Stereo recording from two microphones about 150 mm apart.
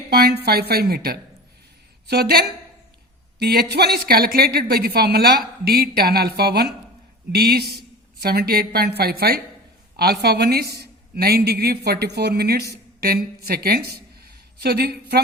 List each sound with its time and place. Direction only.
0.1 s a woman's voice: 90° right